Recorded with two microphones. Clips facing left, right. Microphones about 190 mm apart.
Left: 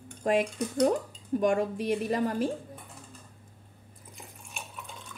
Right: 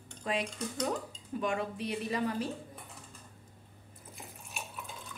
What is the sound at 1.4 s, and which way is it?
A woman's voice, 45° left (ahead or behind).